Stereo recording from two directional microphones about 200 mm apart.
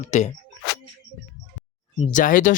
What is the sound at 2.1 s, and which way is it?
Speech, 40° left (ahead or behind).